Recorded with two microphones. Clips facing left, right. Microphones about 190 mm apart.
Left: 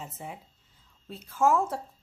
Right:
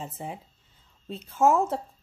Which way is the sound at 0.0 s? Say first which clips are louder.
Right 4 dB; 30° right (ahead or behind).